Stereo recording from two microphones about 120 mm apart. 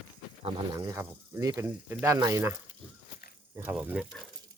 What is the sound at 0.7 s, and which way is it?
Speech, 30° right (ahead or behind).